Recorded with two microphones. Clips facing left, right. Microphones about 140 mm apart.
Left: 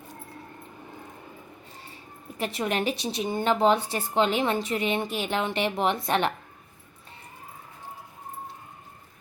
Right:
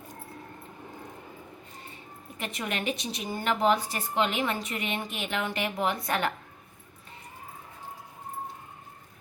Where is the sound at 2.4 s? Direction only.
35° left (ahead or behind).